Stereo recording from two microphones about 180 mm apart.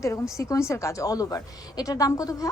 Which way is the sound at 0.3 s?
15° left (ahead or behind).